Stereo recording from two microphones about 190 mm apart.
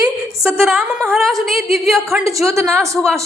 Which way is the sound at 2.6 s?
15° right (ahead or behind).